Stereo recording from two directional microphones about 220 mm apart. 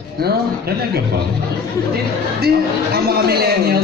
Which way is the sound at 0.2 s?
45° right (ahead or behind).